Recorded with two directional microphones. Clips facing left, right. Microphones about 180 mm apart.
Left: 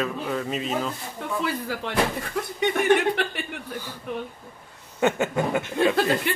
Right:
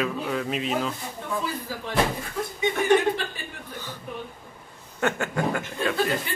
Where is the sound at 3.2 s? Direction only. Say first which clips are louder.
Left 6 dB; 70° left (ahead or behind).